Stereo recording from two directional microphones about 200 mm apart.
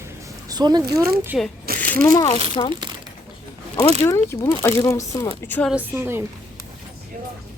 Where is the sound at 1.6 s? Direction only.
45° right (ahead or behind).